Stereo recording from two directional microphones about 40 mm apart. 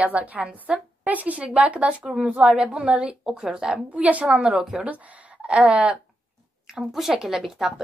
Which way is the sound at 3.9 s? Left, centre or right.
Right.